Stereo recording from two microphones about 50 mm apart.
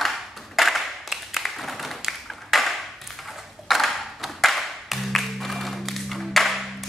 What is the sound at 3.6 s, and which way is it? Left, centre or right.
Music, centre.